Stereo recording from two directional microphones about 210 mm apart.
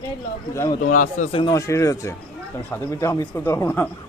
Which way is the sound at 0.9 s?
40° left (ahead or behind).